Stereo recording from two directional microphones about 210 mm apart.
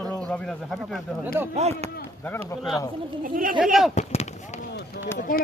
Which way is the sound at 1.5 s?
30° right (ahead or behind).